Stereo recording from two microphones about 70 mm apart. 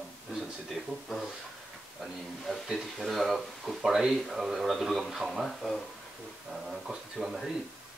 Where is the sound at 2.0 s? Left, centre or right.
Centre.